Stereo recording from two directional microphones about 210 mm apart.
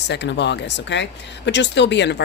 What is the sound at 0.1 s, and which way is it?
Speech, 55° left (ahead or behind).